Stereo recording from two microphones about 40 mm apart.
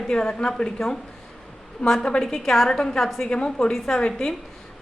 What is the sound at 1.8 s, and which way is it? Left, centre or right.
Speech, left.